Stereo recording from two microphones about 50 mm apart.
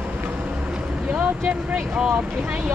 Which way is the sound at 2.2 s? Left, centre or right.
Centre.